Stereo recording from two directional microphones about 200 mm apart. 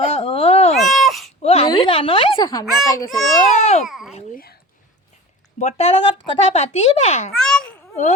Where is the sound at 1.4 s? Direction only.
30° left (ahead or behind).